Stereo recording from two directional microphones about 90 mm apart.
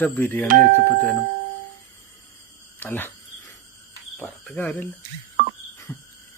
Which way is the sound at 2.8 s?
25° left (ahead or behind).